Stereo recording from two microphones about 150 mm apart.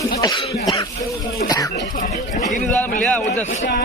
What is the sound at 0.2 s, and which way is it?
Speech, 30° left (ahead or behind).